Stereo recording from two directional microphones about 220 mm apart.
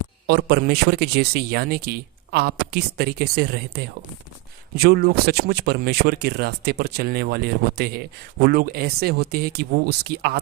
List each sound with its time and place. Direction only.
0.3 s a man's voice: 45° right (ahead or behind)